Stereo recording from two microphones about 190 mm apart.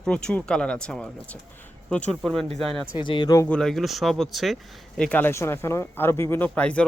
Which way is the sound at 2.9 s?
25° left (ahead or behind).